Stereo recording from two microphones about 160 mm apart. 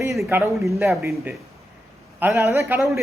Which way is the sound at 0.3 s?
15° right (ahead or behind).